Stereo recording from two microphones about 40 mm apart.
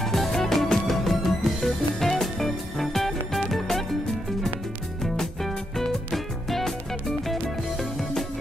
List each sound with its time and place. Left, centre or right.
0.0 s music: centre
5.1 s music: centre